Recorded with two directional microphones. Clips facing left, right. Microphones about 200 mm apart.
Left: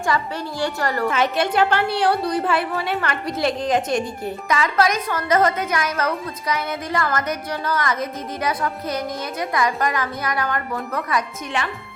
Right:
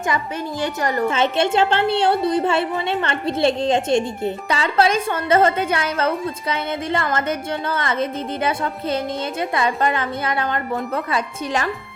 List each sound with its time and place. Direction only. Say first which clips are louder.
0.1 s a woman's voice: even; 20° right (ahead or behind)